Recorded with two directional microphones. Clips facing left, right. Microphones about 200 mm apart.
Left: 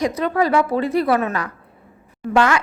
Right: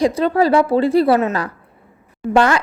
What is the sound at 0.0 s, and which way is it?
A woman's voice, 30° right (ahead or behind).